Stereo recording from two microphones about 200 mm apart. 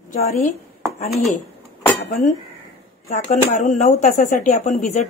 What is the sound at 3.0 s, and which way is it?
Speech, 35° left (ahead or behind).